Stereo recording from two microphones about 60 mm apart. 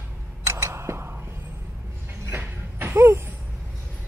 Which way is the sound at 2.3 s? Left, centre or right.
Right.